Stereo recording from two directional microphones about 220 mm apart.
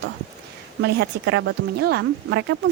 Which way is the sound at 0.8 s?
45° right (ahead or behind).